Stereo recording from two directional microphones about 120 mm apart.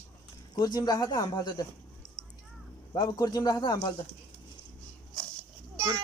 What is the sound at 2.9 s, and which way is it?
Speech, 35° left (ahead or behind).